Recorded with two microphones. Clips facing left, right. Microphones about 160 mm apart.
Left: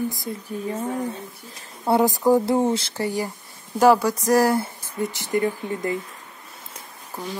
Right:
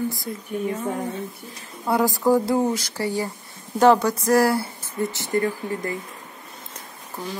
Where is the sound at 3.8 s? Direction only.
10° left (ahead or behind).